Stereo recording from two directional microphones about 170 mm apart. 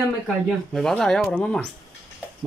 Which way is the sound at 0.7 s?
5° left (ahead or behind).